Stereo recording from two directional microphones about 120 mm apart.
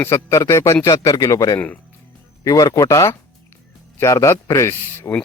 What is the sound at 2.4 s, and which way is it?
Speech, 30° left (ahead or behind).